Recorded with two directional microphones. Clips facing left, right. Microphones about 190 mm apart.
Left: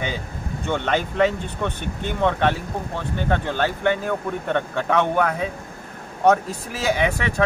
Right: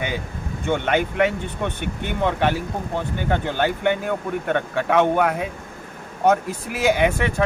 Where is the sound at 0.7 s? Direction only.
10° right (ahead or behind).